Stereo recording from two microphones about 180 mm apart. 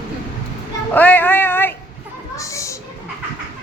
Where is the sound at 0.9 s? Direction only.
10° left (ahead or behind).